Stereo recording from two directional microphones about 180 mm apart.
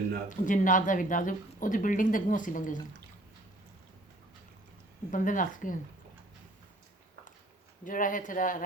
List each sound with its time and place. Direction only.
0.3 s speech: 45° left (ahead or behind)
5.1 s speech: 45° left (ahead or behind)
7.9 s speech: 50° left (ahead or behind)